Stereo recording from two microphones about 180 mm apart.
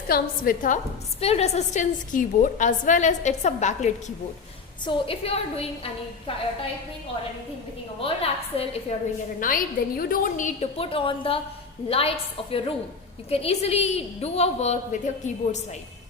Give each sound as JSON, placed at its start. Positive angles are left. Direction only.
{"t": 0.1, "sound": "a woman's voice", "side_deg": 50}
{"t": 1.2, "sound": "a woman's voice", "side_deg": 35}
{"t": 4.9, "sound": "a woman's voice", "side_deg": 30}
{"t": 8.0, "sound": "a woman's voice", "side_deg": 35}
{"t": 9.4, "sound": "a woman's voice", "side_deg": 50}